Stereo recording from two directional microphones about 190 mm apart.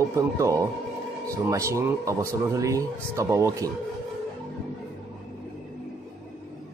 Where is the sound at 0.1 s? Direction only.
15° right (ahead or behind).